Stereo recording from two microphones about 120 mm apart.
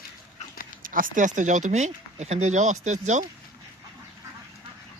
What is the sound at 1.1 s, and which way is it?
Speech, 90° right.